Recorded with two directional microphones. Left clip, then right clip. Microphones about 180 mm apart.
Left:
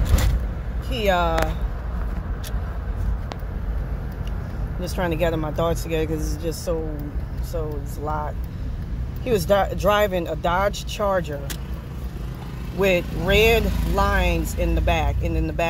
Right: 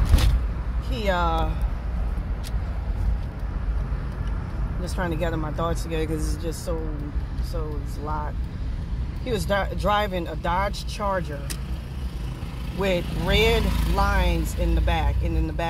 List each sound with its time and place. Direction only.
1.0 s speech: 10° left (ahead or behind)
4.9 s speech: 15° left (ahead or behind)
8.0 s speech: 15° left (ahead or behind)
12.7 s speech: 15° left (ahead or behind)